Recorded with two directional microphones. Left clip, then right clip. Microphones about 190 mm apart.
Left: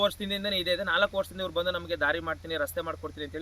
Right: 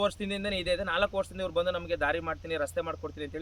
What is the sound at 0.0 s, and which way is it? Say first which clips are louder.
Speech: left 2 dB; 20° right (ahead or behind).